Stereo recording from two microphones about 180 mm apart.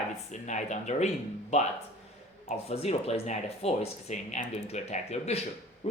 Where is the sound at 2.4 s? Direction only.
35° left (ahead or behind).